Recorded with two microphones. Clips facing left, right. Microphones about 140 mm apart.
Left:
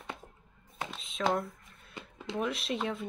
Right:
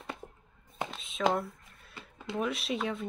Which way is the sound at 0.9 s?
Centre (ahead or behind).